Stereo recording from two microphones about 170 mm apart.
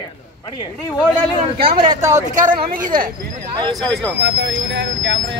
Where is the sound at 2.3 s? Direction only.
50° right (ahead or behind).